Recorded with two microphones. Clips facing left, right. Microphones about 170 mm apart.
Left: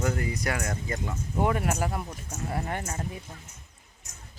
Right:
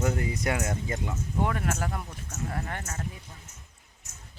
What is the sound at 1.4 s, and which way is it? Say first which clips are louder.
Speech: left 3 dB; 15° left (ahead or behind).